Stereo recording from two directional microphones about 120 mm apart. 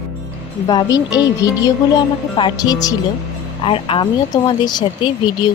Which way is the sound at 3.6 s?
50° left (ahead or behind).